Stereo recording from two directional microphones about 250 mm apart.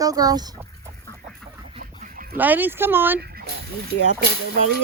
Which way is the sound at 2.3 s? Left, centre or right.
Centre.